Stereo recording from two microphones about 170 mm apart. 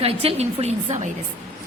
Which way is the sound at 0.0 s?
35° right (ahead or behind).